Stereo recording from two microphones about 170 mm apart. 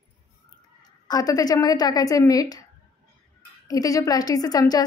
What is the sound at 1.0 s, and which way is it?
A woman's voice, 20° left (ahead or behind).